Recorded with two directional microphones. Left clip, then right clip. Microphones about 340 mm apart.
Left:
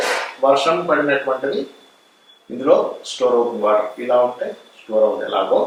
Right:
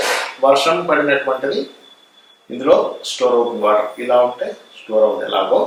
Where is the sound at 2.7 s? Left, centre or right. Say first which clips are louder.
Right 2 dB; centre.